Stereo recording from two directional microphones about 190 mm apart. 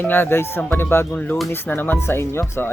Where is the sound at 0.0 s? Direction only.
10° left (ahead or behind).